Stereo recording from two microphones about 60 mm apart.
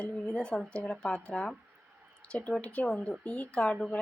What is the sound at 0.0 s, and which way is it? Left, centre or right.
A woman's voice, centre.